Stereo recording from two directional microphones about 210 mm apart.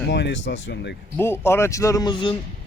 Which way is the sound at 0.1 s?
55° left (ahead or behind).